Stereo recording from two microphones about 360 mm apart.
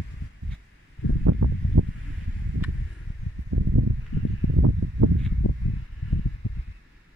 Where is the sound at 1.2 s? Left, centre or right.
Right.